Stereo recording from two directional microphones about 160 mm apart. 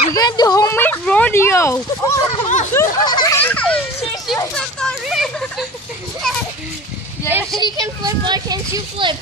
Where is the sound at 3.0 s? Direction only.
25° left (ahead or behind).